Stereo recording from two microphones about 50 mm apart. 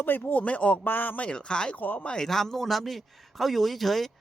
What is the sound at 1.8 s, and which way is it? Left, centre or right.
Speech, left.